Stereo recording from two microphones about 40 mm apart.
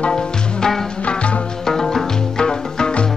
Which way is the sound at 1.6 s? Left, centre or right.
Centre.